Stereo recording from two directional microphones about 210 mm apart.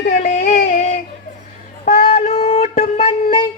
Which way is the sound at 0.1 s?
35° left (ahead or behind).